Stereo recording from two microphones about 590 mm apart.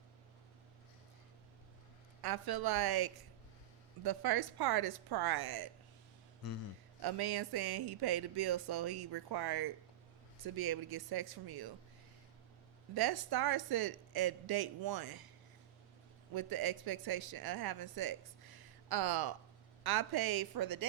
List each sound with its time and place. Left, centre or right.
2.2 s speech: right
7.0 s speech: right
12.9 s speech: right
16.3 s speech: right